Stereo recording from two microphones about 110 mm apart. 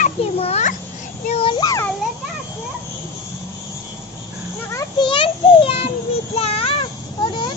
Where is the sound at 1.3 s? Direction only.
60° left (ahead or behind).